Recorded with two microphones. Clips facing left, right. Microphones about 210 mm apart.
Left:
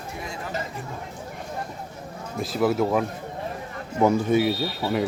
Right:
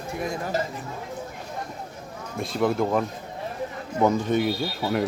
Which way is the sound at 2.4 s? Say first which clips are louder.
Left 1 dB; 5° left (ahead or behind).